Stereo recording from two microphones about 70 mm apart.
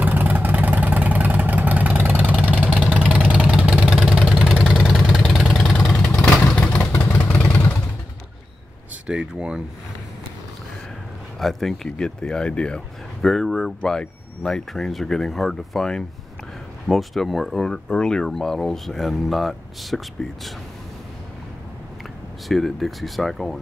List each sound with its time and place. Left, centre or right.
0.0 s vehicle: right
3.8 s vehicle: centre
6.6 s vehicle: left
9.0 s a sound: centre
11.3 s speech: centre
22.5 s speech: centre